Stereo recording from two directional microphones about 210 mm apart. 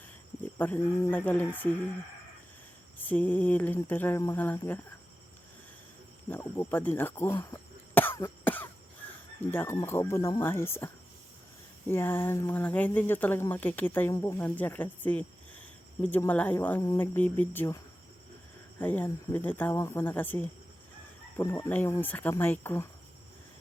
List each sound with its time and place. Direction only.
0.4 s speech: 10° left (ahead or behind)
3.0 s speech: 10° left (ahead or behind)
6.2 s cough: 10° left (ahead or behind)
9.4 s speech: 10° left (ahead or behind)
18.8 s speech: 10° left (ahead or behind)